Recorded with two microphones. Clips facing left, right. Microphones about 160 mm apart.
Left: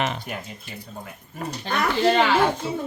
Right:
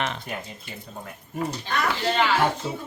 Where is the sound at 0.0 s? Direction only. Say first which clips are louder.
Left 3 dB; 5° left (ahead or behind).